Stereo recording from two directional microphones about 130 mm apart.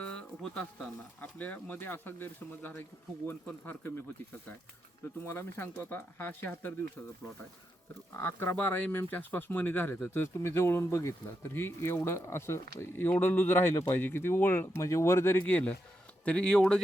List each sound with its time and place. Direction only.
0.0 s speech: 5° left (ahead or behind)
5.2 s speech: 20° left (ahead or behind)
8.1 s speech: 15° left (ahead or behind)